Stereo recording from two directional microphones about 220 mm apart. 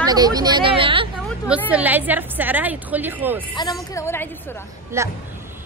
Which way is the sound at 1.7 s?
5° right (ahead or behind).